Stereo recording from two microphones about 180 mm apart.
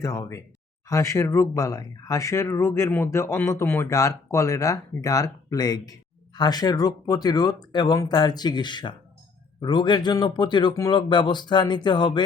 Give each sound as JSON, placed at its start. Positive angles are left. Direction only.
{"t": 0.0, "sound": "speech", "side_deg": 15}